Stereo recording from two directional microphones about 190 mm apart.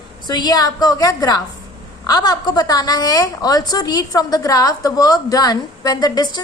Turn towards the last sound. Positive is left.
turn(degrees=20)  # may be behind; listen again after turning